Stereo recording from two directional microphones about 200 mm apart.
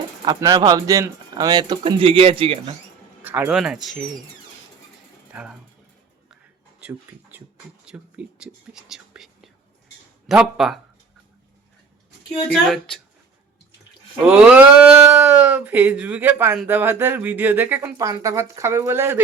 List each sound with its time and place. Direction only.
0.3 s speech: 15° right (ahead or behind)
3.2 s speech: 10° right (ahead or behind)
5.3 s speech: 5° right (ahead or behind)
6.7 s speech: 10° right (ahead or behind)
8.9 s whispering: centre (ahead or behind)
10.2 s speech: centre (ahead or behind)
12.5 s speech: centre (ahead or behind)
14.3 s speech: 5° right (ahead or behind)